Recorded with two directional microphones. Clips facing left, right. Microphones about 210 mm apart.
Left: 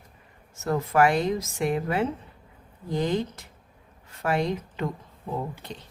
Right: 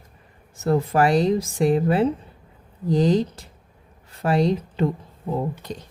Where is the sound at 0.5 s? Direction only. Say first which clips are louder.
Right 4 dB; 30° right (ahead or behind).